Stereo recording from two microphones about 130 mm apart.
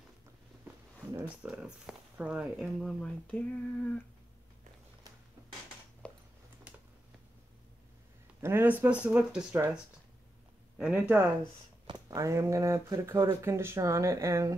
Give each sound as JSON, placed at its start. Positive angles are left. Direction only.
{"t": 1.4, "sound": "speech", "side_deg": -10}
{"t": 2.8, "sound": "speech", "side_deg": 10}
{"t": 6.0, "sound": "a sound", "side_deg": 10}
{"t": 8.4, "sound": "speech", "side_deg": -20}
{"t": 10.8, "sound": "speech", "side_deg": -10}